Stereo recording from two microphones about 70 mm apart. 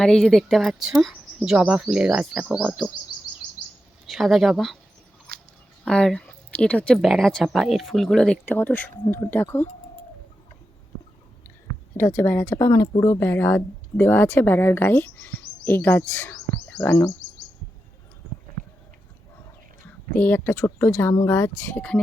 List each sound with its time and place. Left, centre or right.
0.0 s speech: centre
1.1 s speech: centre
4.1 s speech: centre
5.8 s speech: centre
6.9 s speech: centre
8.4 s speech: left
11.9 s speech: left
12.5 s speech: left
13.2 s speech: left
20.1 s speech: left
21.8 s speech: centre